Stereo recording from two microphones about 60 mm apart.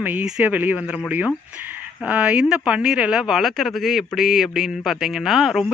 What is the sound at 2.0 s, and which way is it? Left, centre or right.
Speech, centre.